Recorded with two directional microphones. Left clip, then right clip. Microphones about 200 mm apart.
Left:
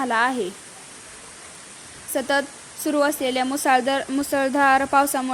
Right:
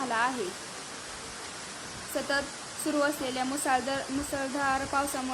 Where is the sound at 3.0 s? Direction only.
35° left (ahead or behind).